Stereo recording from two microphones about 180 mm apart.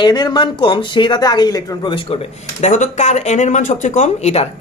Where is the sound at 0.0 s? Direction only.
25° left (ahead or behind).